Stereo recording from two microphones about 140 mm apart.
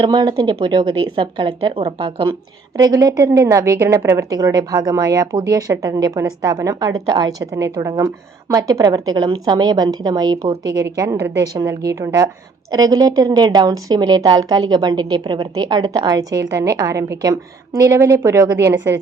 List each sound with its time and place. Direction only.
0.0 s speech: 30° right (ahead or behind)
2.7 s a woman's voice: 25° right (ahead or behind)